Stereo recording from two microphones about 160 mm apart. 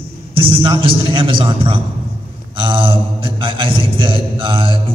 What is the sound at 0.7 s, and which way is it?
A man's voice, 35° right (ahead or behind).